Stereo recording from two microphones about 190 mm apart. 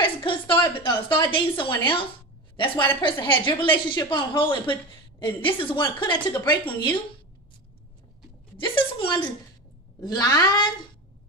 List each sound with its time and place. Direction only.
0.0 s a woman's voice: 25° left (ahead or behind)
8.5 s a woman's voice: 25° left (ahead or behind)